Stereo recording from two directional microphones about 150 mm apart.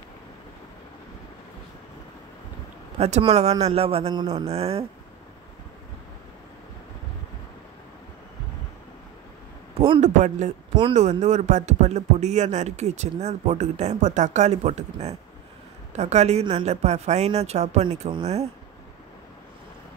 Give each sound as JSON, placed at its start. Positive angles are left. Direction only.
{"t": 3.0, "sound": "a man's voice", "side_deg": -45}
{"t": 9.8, "sound": "speech", "side_deg": -45}